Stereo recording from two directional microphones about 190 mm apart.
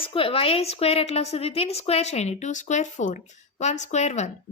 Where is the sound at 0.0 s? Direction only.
30° left (ahead or behind).